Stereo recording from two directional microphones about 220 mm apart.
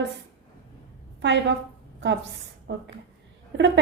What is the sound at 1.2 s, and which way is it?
A woman's voice, 55° right (ahead or behind).